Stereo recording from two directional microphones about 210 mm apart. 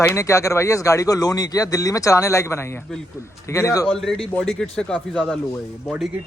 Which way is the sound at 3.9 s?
Centre (ahead or behind).